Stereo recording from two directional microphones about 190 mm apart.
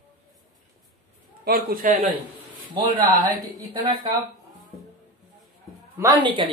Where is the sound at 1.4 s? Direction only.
50° right (ahead or behind).